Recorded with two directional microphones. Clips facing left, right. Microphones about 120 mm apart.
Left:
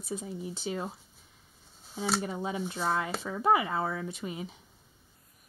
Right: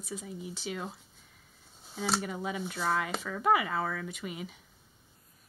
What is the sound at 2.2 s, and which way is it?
Speech, 30° left (ahead or behind).